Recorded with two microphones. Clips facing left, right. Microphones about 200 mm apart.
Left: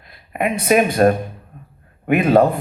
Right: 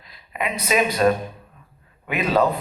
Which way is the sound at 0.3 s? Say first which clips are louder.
Left 6 dB; 50° left (ahead or behind).